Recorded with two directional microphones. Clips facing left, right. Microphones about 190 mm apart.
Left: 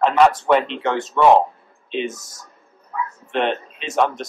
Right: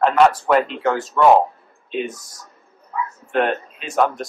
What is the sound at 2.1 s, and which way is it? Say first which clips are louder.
Speech: even; 25° left (ahead or behind).